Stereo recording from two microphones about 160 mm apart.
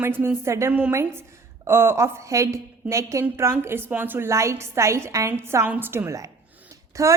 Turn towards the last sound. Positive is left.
turn(degrees=-20)  # may be behind; listen again after turning